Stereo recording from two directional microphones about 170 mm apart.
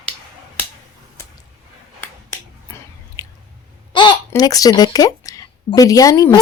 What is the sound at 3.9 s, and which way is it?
Speech, 25° left (ahead or behind).